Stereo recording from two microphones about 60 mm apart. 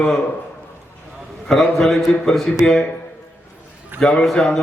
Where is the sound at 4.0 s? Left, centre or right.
Centre.